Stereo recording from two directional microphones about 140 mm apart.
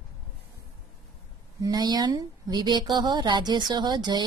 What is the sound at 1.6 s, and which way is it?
A woman's voice, 30° right (ahead or behind).